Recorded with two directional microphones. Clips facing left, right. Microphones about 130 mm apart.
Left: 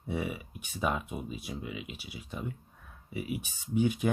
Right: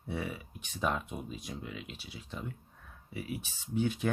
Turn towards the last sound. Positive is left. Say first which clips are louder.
# left 3 dB
turn(degrees=15)  # may be behind; listen again after turning